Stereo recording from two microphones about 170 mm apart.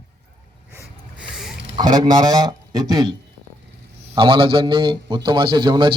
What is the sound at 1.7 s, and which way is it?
A man's voice, 25° right (ahead or behind).